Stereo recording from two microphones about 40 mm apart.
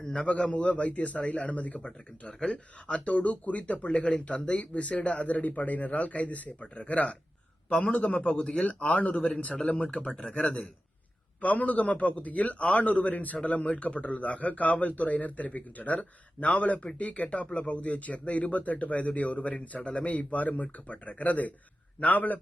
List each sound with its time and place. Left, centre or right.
0.0 s a man's voice: left
0.3 s a man's voice: left
8.3 s a man's voice: left